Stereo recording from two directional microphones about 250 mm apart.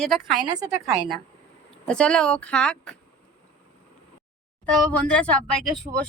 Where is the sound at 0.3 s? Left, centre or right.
Centre.